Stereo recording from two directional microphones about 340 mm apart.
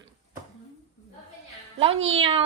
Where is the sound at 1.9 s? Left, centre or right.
Right.